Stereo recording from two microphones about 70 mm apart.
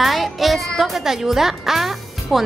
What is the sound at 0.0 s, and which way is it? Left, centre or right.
Music, centre.